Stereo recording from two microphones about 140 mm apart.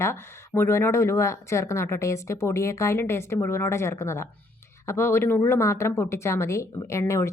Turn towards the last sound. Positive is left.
turn(degrees=20)  # may be behind; listen again after turning